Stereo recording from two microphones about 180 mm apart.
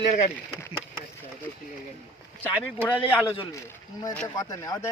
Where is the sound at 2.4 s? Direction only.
10° left (ahead or behind).